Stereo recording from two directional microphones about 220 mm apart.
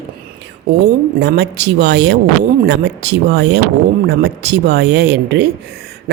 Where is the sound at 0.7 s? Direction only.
45° right (ahead or behind).